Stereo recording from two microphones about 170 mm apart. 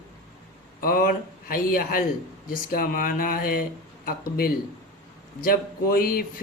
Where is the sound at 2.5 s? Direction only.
55° left (ahead or behind).